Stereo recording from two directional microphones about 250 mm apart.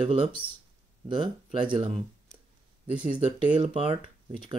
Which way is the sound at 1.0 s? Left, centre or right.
Centre.